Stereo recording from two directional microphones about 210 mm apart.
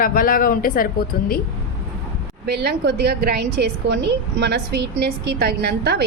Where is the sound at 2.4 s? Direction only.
50° right (ahead or behind).